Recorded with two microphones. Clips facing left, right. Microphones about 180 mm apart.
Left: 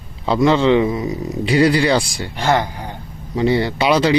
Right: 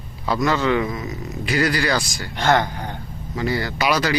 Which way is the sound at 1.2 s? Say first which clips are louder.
Left 7 dB; 30° left (ahead or behind).